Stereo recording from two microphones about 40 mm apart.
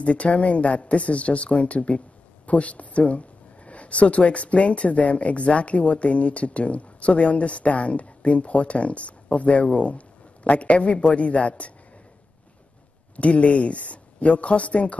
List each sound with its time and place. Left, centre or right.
0.0 s speech: left
13.1 s speech: left